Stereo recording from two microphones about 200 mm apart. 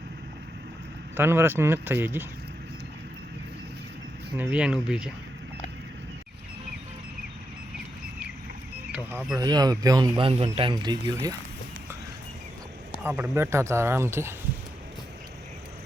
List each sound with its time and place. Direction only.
1.1 s speech: 10° right (ahead or behind)
4.4 s speech: 5° right (ahead or behind)
8.9 s speech: 10° right (ahead or behind)
13.1 s speech: 10° right (ahead or behind)